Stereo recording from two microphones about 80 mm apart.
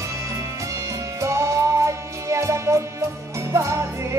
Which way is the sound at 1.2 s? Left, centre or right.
Right.